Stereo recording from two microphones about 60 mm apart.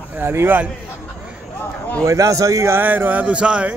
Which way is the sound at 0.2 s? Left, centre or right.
Right.